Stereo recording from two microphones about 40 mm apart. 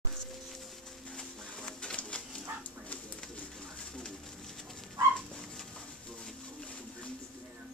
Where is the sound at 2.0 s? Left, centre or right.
Left.